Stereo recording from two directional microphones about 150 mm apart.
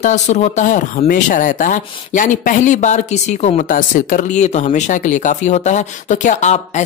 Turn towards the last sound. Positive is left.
turn(degrees=50)  # may be behind; listen again after turning